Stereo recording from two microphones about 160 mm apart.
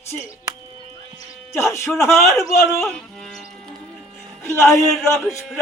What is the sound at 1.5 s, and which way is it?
A man's voice, 20° left (ahead or behind).